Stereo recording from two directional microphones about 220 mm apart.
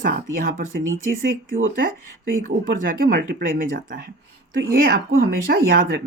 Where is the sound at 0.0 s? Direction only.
40° right (ahead or behind).